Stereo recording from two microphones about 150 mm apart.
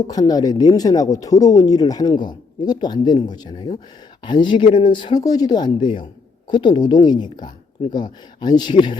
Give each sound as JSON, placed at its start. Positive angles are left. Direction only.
{"t": 0.1, "sound": "speech", "side_deg": 25}